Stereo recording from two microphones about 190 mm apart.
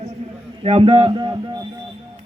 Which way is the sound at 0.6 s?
30° right (ahead or behind).